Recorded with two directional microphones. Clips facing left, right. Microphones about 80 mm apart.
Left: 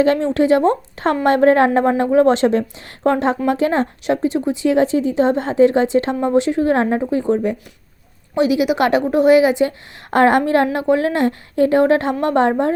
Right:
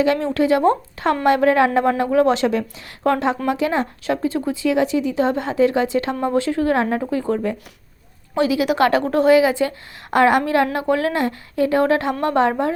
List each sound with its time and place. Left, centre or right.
0.0 s a woman's voice: left